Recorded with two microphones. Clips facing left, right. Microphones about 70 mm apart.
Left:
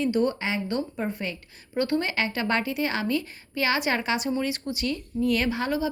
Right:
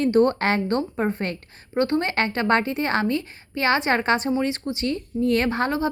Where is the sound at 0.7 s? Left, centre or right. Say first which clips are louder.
Right 5 dB; right.